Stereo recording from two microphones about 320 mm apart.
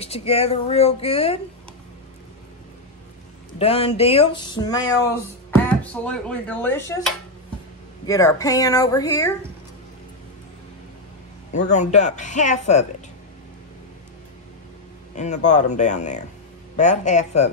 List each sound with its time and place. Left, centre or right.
0.0 s speech: centre
3.5 s speech: centre
11.5 s speech: left
15.1 s speech: left